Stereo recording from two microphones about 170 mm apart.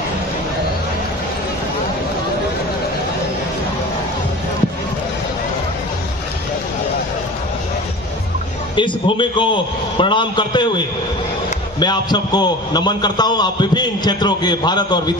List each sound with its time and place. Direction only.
8.7 s a man's voice: 30° left (ahead or behind)
11.8 s a man's voice: 25° left (ahead or behind)